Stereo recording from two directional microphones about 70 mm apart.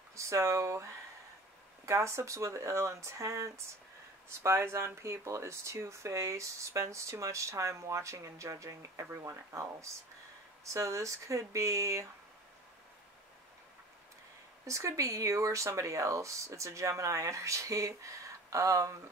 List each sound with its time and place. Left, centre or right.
0.1 s speech: right
1.9 s speech: right
14.7 s speech: right